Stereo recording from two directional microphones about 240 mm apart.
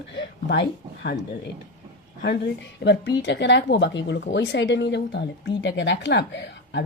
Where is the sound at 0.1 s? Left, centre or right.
Left.